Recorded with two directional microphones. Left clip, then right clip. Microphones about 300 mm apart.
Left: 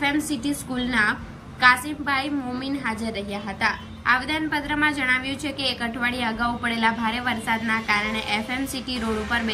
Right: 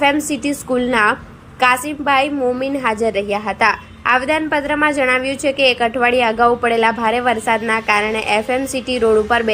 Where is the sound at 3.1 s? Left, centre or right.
Right.